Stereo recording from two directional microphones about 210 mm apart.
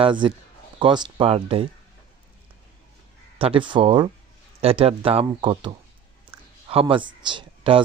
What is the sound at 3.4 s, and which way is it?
Speech, 25° right (ahead or behind).